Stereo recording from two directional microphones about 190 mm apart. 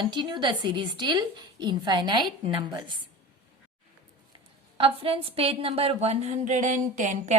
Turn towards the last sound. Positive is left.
turn(degrees=-40)  # may be behind; listen again after turning